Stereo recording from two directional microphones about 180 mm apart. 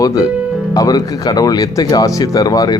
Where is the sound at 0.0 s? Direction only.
20° left (ahead or behind).